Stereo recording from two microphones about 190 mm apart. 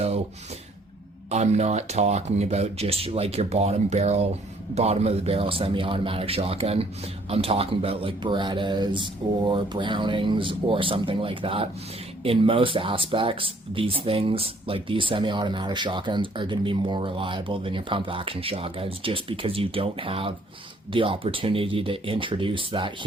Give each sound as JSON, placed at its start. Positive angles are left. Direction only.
{"t": 1.3, "sound": "speech", "side_deg": -35}